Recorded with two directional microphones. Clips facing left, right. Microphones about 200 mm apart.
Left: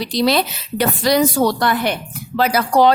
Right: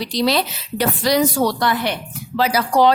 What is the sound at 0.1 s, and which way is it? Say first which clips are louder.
A woman's voice: left 2 dB; 55° left (ahead or behind).